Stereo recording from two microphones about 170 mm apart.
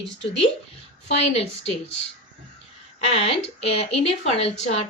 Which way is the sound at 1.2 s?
35° left (ahead or behind).